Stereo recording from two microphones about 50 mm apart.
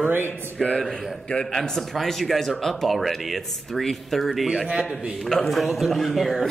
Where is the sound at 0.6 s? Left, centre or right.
Centre.